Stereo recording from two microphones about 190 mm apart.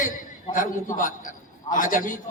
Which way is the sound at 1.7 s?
45° left (ahead or behind).